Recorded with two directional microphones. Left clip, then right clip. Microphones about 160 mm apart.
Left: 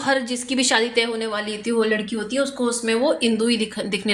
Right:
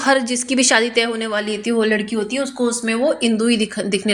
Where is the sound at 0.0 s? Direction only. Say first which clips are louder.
Right 5 dB; 30° right (ahead or behind).